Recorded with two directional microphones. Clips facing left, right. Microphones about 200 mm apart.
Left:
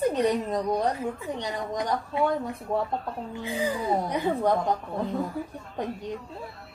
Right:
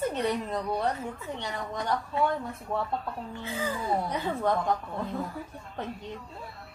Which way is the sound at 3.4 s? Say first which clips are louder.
Left 4 dB; 15° left (ahead or behind).